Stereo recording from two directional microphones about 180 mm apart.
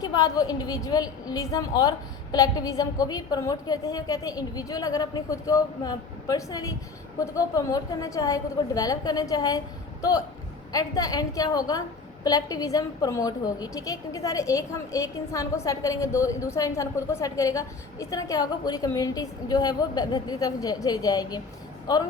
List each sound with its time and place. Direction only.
0.0 s a woman's voice: 20° left (ahead or behind)